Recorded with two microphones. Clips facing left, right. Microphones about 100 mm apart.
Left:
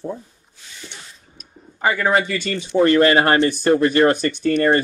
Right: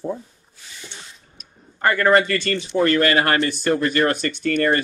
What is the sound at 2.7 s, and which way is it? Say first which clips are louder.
Speech: left 4 dB; 25° left (ahead or behind).